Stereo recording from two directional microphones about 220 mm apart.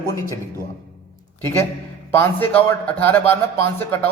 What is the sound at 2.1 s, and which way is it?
A man's voice, 10° left (ahead or behind).